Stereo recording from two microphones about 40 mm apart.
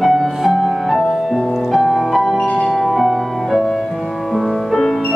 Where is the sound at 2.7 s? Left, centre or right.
Centre.